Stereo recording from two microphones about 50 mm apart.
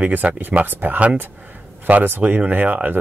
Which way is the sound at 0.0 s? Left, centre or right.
Right.